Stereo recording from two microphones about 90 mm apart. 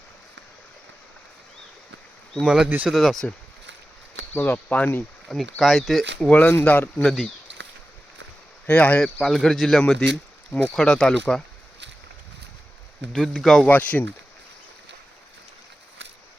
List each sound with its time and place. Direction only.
2.3 s speech: 5° right (ahead or behind)
2.6 s speech: 20° right (ahead or behind)
2.9 s speech: centre (ahead or behind)
4.4 s speech: 20° left (ahead or behind)
5.3 s speech: centre (ahead or behind)
6.1 s speech: 10° left (ahead or behind)
7.0 s speech: centre (ahead or behind)
8.6 s speech: 15° left (ahead or behind)
9.2 s speech: 5° left (ahead or behind)
13.1 s speech: 5° left (ahead or behind)
13.7 s speech: 20° left (ahead or behind)